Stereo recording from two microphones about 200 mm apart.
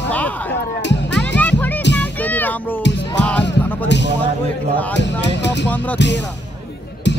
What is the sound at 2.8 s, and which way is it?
Music, 60° left (ahead or behind).